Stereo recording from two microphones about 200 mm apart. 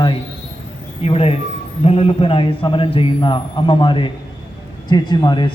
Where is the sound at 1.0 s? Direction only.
30° left (ahead or behind).